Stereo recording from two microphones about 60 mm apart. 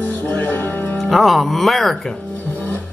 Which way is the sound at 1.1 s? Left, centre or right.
Centre.